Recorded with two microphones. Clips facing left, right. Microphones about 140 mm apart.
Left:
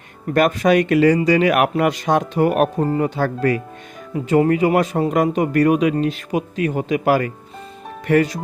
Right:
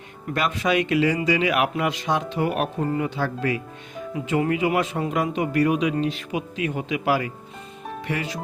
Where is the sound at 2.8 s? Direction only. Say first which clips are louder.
Left 5 dB; 40° left (ahead or behind).